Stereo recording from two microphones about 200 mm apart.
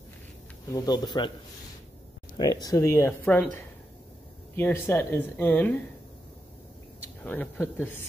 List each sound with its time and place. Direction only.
0.7 s speech: 20° left (ahead or behind)
2.3 s speech: 20° left (ahead or behind)
7.2 s speech: 10° left (ahead or behind)